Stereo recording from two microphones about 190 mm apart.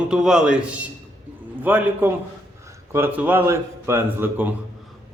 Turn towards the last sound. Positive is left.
turn(degrees=-10)  # may be behind; listen again after turning